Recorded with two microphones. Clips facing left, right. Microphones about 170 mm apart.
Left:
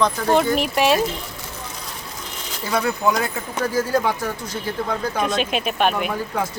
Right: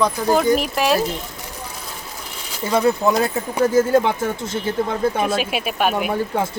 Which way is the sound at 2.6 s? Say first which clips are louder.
Right 4 dB; 25° right (ahead or behind).